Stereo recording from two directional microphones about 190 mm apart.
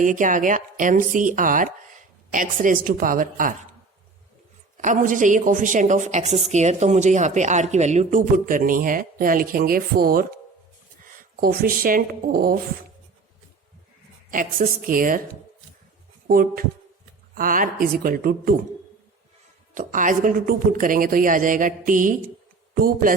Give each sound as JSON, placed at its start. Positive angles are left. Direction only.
{"t": 0.0, "sound": "a woman's voice", "side_deg": -45}
{"t": 4.8, "sound": "a woman's voice", "side_deg": -40}
{"t": 11.3, "sound": "a woman's voice", "side_deg": -50}
{"t": 14.3, "sound": "a woman's voice", "side_deg": -45}
{"t": 16.2, "sound": "a woman's voice", "side_deg": -50}
{"t": 19.7, "sound": "a woman's voice", "side_deg": -45}